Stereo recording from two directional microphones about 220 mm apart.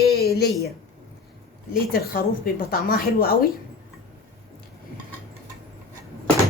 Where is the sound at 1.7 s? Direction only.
40° left (ahead or behind).